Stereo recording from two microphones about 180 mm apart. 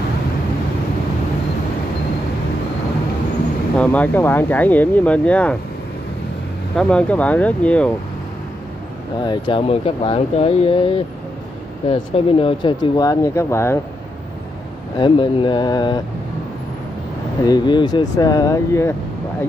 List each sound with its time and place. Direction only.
3.7 s speech: 10° left (ahead or behind)
6.8 s speech: 5° left (ahead or behind)
9.2 s speech: 25° left (ahead or behind)
15.0 s speech: 30° left (ahead or behind)
17.5 s speech: 25° left (ahead or behind)